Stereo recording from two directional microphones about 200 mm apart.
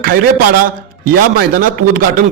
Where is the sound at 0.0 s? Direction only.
45° right (ahead or behind).